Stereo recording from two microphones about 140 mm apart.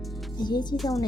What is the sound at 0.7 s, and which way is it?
Music, centre (ahead or behind).